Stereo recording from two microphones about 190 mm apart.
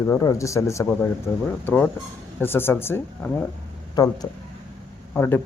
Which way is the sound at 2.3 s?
10° left (ahead or behind).